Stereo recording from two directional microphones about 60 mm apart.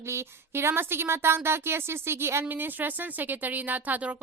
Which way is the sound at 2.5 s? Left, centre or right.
Right.